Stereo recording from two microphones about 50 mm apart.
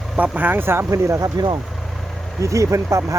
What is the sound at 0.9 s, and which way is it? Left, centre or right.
Speech, right.